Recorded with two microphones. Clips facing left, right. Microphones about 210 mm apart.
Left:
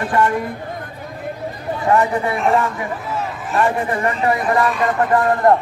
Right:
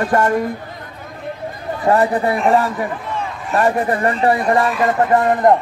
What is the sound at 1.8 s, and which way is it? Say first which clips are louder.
Speech: right 2 dB; 35° right (ahead or behind).